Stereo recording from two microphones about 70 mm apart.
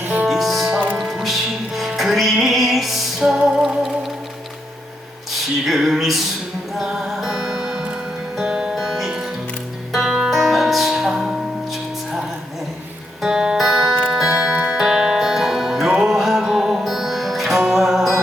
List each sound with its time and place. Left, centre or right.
0.0 s music: right
0.3 s music: centre
5.6 s a sound: centre
6.7 s music: centre
13.2 s music: centre